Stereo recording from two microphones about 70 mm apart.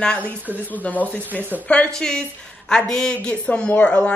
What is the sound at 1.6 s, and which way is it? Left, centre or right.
A woman's voice, centre.